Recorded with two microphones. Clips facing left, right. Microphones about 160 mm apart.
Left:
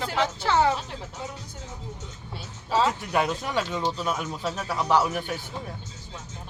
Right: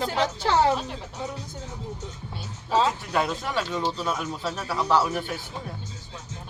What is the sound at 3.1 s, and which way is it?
Speech, 15° left (ahead or behind).